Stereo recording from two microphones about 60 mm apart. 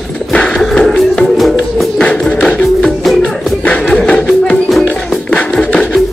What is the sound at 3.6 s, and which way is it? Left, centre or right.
Music, centre.